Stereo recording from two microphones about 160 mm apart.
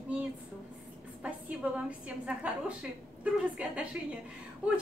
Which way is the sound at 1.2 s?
10° right (ahead or behind).